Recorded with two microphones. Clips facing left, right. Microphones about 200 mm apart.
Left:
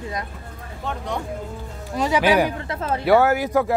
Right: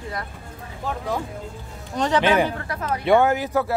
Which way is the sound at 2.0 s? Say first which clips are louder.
Left 1 dB; 10° left (ahead or behind).